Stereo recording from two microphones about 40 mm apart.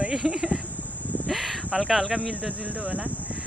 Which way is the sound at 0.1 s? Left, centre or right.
Centre.